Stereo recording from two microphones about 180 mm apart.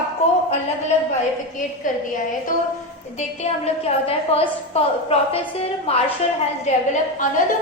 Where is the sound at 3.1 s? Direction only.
35° left (ahead or behind).